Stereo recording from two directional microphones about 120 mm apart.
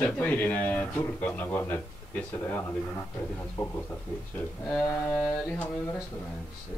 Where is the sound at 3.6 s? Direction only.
30° left (ahead or behind).